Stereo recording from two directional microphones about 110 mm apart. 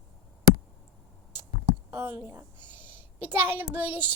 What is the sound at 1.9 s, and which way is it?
A woman's voice, 25° right (ahead or behind).